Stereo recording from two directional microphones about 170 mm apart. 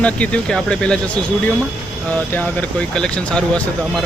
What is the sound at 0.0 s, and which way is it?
Speech, 5° left (ahead or behind).